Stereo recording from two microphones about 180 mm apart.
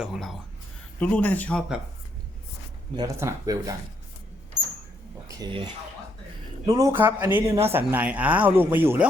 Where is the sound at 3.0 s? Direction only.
15° right (ahead or behind).